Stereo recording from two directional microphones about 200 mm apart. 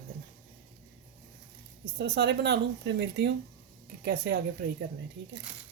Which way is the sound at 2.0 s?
55° right (ahead or behind).